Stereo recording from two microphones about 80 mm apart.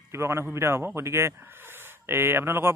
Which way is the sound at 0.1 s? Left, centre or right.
Right.